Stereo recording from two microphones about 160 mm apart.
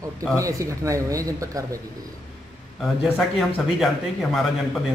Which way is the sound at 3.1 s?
5° left (ahead or behind).